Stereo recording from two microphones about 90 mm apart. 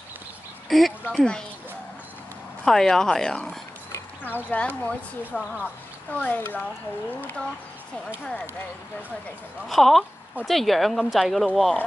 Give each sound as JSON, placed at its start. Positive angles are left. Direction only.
{"t": 0.7, "sound": "speech", "side_deg": 0}
{"t": 1.0, "sound": "speech", "side_deg": 10}
{"t": 2.6, "sound": "speech", "side_deg": 5}
{"t": 9.7, "sound": "speech", "side_deg": 0}